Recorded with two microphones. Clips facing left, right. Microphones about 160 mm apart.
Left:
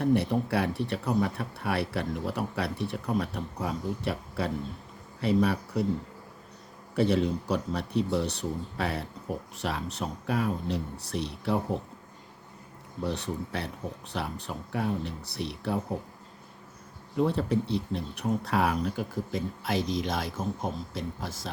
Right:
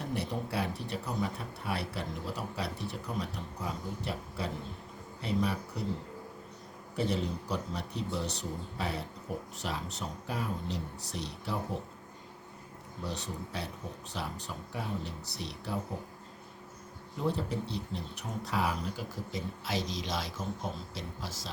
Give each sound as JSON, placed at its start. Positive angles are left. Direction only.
{"t": 0.0, "sound": "speech", "side_deg": 60}
{"t": 6.9, "sound": "speech", "side_deg": 65}
{"t": 13.1, "sound": "speech", "side_deg": 60}
{"t": 17.2, "sound": "speech", "side_deg": 65}